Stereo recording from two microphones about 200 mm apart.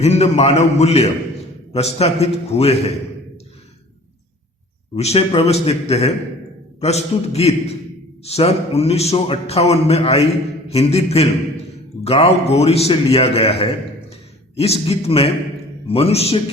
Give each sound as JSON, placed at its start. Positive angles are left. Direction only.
{"t": 0.0, "sound": "a man's voice", "side_deg": 30}
{"t": 4.9, "sound": "a man's voice", "side_deg": 30}